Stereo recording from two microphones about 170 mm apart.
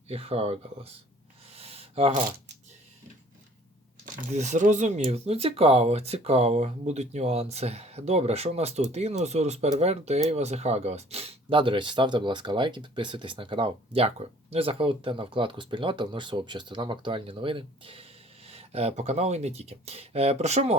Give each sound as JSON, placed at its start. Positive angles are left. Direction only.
{"t": 0.1, "sound": "speech", "side_deg": -35}
{"t": 1.5, "sound": "a sound", "side_deg": -35}
{"t": 4.3, "sound": "speech", "side_deg": -45}